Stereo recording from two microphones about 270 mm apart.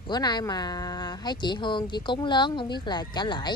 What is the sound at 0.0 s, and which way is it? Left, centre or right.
Speech, centre.